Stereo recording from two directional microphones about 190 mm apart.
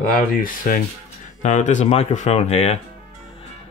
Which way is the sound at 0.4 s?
45° left (ahead or behind).